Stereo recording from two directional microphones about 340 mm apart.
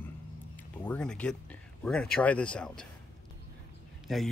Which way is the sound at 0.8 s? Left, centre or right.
Centre.